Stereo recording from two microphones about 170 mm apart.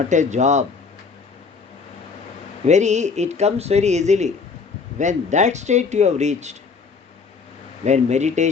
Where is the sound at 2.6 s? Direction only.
45° right (ahead or behind).